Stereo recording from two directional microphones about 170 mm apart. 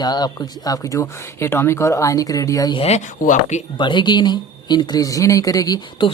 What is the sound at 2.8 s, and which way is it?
Speech, 45° left (ahead or behind).